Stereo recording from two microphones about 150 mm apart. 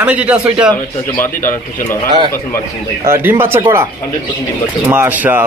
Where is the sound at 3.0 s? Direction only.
15° right (ahead or behind).